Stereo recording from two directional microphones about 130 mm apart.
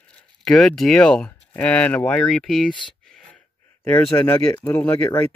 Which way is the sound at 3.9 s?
15° left (ahead or behind).